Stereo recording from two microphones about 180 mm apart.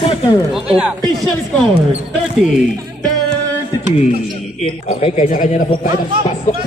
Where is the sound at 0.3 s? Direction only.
5° right (ahead or behind).